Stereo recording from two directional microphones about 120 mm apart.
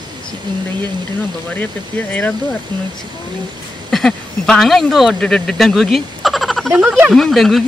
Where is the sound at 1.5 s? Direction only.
15° left (ahead or behind).